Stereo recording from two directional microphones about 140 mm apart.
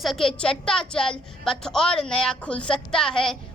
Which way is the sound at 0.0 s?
Centre (ahead or behind).